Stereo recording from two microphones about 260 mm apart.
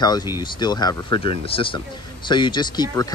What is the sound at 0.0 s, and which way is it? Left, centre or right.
Speech, centre.